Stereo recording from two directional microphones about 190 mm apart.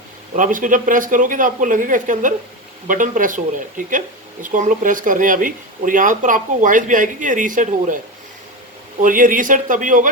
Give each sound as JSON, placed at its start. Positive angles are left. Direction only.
{"t": 0.3, "sound": "speech", "side_deg": -45}
{"t": 9.0, "sound": "speech", "side_deg": -45}